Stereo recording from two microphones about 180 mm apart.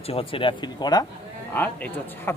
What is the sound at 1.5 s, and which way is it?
Speech, 10° left (ahead or behind).